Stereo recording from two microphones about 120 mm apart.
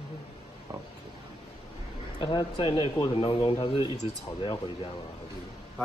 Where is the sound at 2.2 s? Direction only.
40° left (ahead or behind).